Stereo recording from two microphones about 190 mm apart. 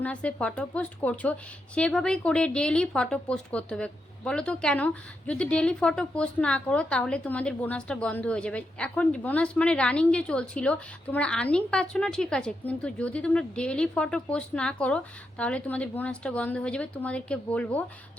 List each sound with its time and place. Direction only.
0.0 s speech: 5° left (ahead or behind)